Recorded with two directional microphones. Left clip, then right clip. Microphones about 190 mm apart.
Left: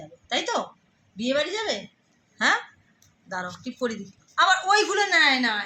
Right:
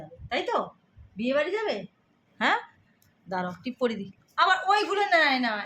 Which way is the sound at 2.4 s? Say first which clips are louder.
Left 3 dB; 45° right (ahead or behind).